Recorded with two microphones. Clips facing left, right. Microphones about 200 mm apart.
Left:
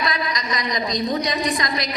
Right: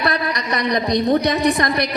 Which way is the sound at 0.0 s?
60° right (ahead or behind).